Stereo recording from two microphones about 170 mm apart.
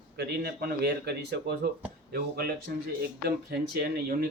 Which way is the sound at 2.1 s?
60° right (ahead or behind).